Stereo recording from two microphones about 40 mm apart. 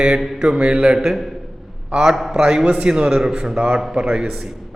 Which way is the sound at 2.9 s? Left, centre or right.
Centre.